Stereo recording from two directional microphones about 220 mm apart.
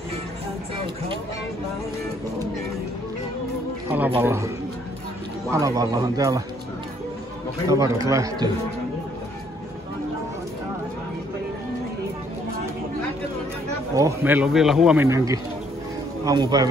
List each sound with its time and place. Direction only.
4.2 s speech: 10° right (ahead or behind)
5.5 s speech: 15° right (ahead or behind)
7.6 s speech: 15° right (ahead or behind)
13.9 s speech: 10° right (ahead or behind)